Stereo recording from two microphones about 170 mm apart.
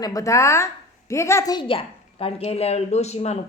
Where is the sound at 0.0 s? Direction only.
20° left (ahead or behind).